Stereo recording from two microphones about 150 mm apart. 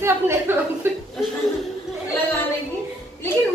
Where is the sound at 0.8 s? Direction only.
15° right (ahead or behind).